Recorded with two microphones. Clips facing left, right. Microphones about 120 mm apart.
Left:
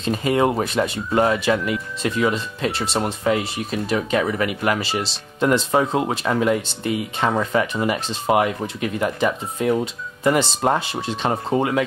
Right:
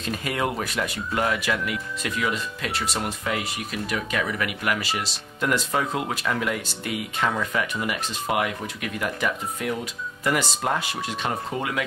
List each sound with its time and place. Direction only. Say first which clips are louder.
0.0 s speech: left 8 dB; 25° left (ahead or behind)